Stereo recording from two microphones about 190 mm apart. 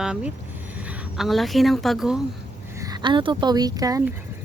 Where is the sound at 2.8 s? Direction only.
20° right (ahead or behind).